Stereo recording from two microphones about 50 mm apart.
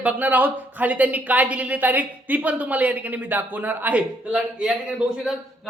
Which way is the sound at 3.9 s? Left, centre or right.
Right.